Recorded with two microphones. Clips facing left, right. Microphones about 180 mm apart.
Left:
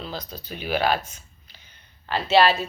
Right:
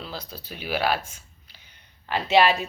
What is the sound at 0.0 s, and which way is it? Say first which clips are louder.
Speech: left 3 dB; 5° right (ahead or behind).